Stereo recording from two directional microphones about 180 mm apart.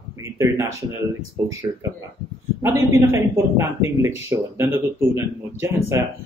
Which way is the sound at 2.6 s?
15° right (ahead or behind).